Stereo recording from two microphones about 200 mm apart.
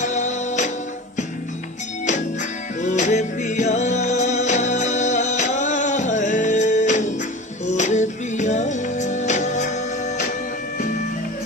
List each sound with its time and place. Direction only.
0.0 s music: 35° left (ahead or behind)
2.8 s music: 35° left (ahead or behind)